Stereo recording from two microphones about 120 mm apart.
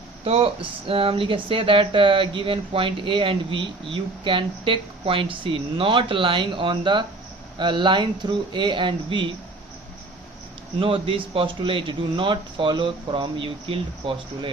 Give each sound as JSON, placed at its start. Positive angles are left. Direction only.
{"t": 0.3, "sound": "speech", "side_deg": -50}
{"t": 10.8, "sound": "speech", "side_deg": -50}